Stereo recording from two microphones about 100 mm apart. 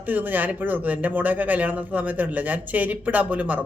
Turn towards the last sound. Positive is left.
turn(degrees=-15)  # may be behind; listen again after turning